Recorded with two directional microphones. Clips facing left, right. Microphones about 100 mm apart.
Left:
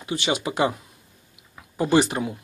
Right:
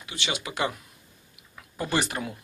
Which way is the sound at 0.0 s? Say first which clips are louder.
Left 8 dB; 35° left (ahead or behind).